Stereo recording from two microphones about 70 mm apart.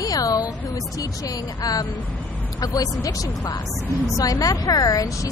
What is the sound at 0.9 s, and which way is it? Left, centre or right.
Speech, left.